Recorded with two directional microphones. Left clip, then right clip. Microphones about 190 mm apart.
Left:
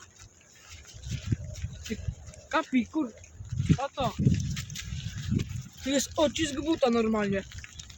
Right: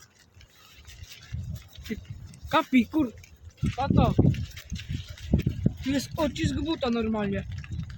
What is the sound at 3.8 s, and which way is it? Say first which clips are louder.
Speech: right 5 dB; 35° right (ahead or behind).